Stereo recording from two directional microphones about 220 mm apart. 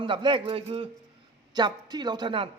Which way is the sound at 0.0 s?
20° right (ahead or behind).